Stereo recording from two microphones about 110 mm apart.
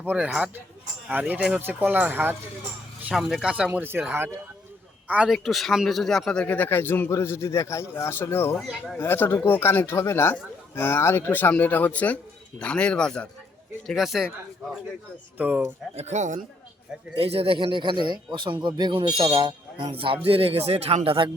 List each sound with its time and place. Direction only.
0.0 s speech: 15° right (ahead or behind)
0.3 s speech: 5° right (ahead or behind)
3.2 s a man's voice: 5° right (ahead or behind)
5.3 s speech: centre (ahead or behind); by 8.5 s 20° left (ahead or behind)
8.5 s speech: centre (ahead or behind)
9.0 s speech: 20° left (ahead or behind); by 15.6 s 10° right (ahead or behind)
16.0 s speech: 90° right
17.2 s speech: 60° right (ahead or behind)